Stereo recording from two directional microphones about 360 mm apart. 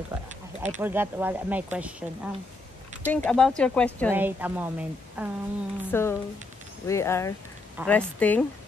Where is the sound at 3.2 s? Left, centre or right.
Centre.